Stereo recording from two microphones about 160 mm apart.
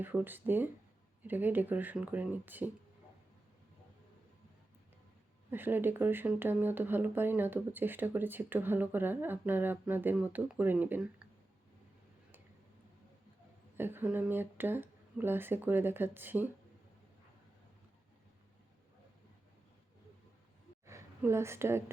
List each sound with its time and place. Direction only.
0.0 s speech: 10° right (ahead or behind)
5.5 s speech: 10° right (ahead or behind)
13.7 s speech: 15° right (ahead or behind)
20.8 s a woman's voice: 15° right (ahead or behind)